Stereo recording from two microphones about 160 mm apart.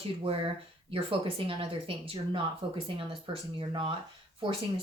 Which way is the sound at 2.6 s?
35° right (ahead or behind).